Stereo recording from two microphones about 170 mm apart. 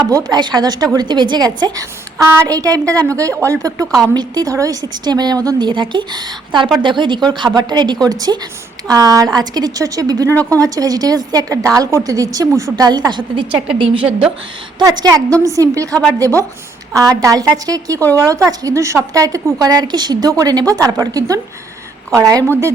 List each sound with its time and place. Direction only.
0.0 s a woman's voice: 25° right (ahead or behind)